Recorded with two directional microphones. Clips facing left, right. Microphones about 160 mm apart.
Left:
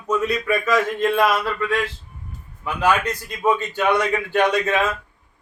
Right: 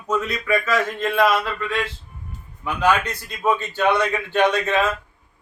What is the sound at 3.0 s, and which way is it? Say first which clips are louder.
Speech: left 2 dB; 10° left (ahead or behind).